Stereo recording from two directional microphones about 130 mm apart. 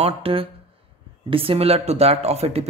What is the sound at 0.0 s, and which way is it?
A man's voice, 45° right (ahead or behind).